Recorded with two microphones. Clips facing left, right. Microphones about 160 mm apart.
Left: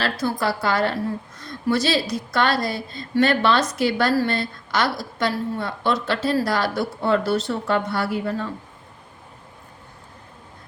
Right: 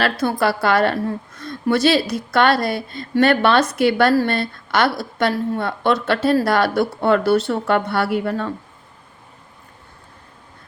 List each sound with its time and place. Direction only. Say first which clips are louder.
0.0 s a woman's voice: right 4 dB; 60° right (ahead or behind)